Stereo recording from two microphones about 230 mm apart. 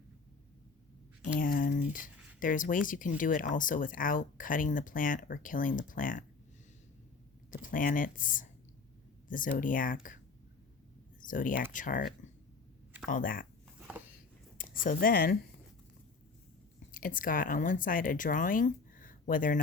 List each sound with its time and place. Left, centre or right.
1.4 s speech: left
7.5 s speech: left
11.2 s speech: left
13.7 s a sound: centre
14.6 s speech: left
16.9 s speech: left